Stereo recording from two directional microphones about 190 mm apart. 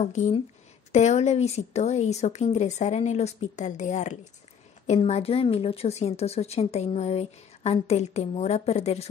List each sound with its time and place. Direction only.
0.9 s a woman's voice: 35° left (ahead or behind)